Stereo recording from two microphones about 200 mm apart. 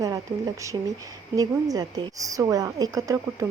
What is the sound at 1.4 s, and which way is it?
Speech, 15° right (ahead or behind).